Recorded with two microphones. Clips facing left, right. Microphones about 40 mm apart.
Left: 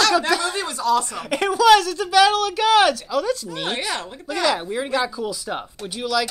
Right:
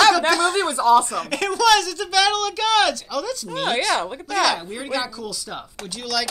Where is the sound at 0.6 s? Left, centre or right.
Right.